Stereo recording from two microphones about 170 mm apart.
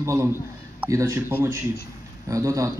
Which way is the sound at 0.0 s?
15° right (ahead or behind).